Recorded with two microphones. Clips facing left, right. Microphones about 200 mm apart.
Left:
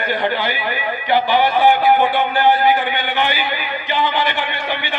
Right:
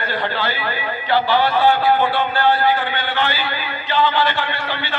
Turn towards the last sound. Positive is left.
turn(degrees=15)  # may be behind; listen again after turning